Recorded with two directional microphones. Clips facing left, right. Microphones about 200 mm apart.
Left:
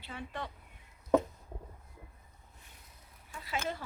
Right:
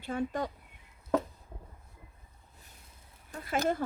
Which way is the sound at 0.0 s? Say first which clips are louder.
Right 9 dB; 45° right (ahead or behind).